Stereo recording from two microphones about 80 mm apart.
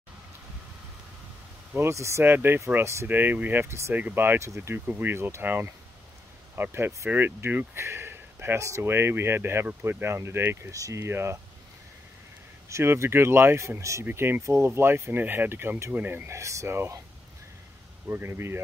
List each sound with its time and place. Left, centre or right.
1.8 s speech: right
3.1 s speech: right
3.9 s speech: right
12.6 s speech: right
14.0 s speech: right
14.4 s speech: right
16.3 s speech: right
18.0 s speech: right